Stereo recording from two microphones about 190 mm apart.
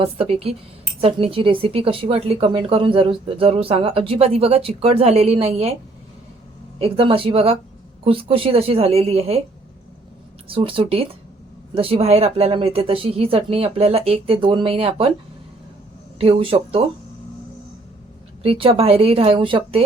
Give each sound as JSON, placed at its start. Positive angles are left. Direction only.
{"t": 0.0, "sound": "a woman's voice", "side_deg": -30}
{"t": 6.7, "sound": "a woman's voice", "side_deg": -30}
{"t": 10.5, "sound": "a woman's voice", "side_deg": -30}
{"t": 16.1, "sound": "a woman's voice", "side_deg": -30}
{"t": 18.4, "sound": "a woman's voice", "side_deg": -30}